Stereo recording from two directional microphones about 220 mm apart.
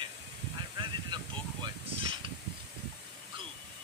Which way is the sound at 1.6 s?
25° right (ahead or behind).